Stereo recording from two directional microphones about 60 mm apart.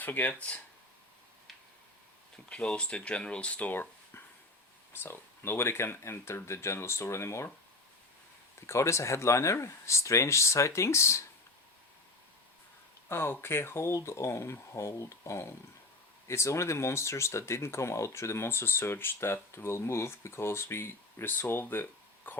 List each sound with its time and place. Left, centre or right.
0.0 s speech: left
2.6 s speech: centre
5.0 s speech: left
8.6 s speech: left
13.1 s speech: left